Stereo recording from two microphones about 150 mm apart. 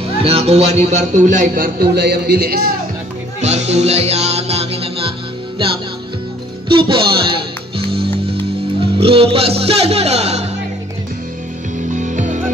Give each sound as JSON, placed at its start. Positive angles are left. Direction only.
{"t": 0.2, "sound": "a man's voice", "side_deg": -40}
{"t": 3.3, "sound": "music", "side_deg": -50}
{"t": 6.7, "sound": "speech", "side_deg": -35}
{"t": 9.0, "sound": "speech", "side_deg": -40}
{"t": 11.9, "sound": "music", "side_deg": -55}